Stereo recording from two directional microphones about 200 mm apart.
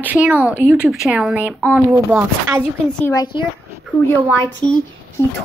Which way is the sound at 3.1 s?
25° left (ahead or behind).